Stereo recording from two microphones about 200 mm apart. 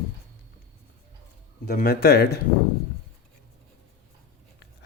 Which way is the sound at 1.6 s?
50° left (ahead or behind).